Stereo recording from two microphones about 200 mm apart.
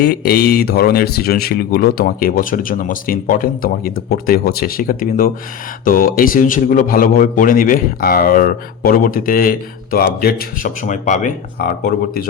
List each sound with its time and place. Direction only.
0.0 s a man's voice: 55° left (ahead or behind)